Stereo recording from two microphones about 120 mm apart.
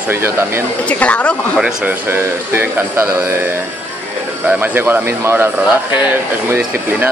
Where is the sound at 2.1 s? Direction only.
20° right (ahead or behind).